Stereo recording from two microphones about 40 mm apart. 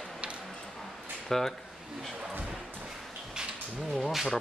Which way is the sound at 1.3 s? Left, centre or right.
Centre.